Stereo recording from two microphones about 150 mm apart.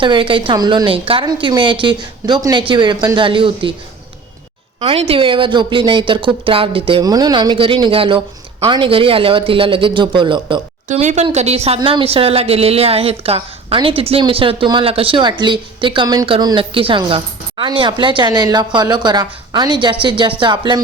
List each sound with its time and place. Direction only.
0.0 s speech: 35° right (ahead or behind)
4.8 s speech: 40° right (ahead or behind)
10.8 s speech: 50° right (ahead or behind); by 20.3 s 35° right (ahead or behind)
20.4 s music: 30° right (ahead or behind)